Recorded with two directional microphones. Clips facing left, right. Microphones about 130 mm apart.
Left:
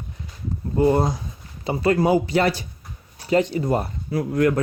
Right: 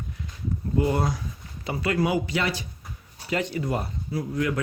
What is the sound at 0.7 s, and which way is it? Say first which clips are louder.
Speech: left 6 dB; 35° left (ahead or behind).